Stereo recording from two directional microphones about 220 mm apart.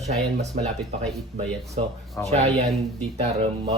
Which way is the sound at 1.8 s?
25° right (ahead or behind).